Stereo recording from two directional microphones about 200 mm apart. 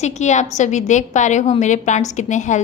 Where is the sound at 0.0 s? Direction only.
35° left (ahead or behind).